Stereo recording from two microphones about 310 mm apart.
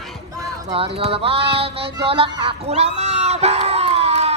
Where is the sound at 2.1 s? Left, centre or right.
Centre.